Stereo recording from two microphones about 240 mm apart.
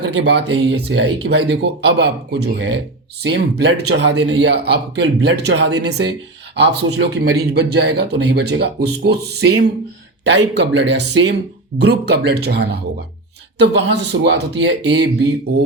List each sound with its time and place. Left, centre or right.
0.0 s speech: right